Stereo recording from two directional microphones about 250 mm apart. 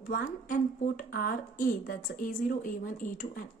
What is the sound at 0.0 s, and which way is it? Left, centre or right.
A woman's voice, left.